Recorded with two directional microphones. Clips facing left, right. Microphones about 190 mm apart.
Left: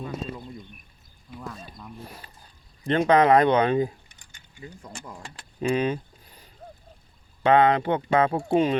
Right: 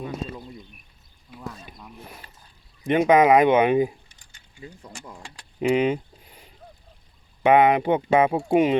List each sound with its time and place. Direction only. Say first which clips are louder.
0.0 s a sound: right 1 dB; 5° right (ahead or behind)
2.8 s speech: right 2 dB; 15° right (ahead or behind)
7.4 s speech: right 2 dB; 15° right (ahead or behind)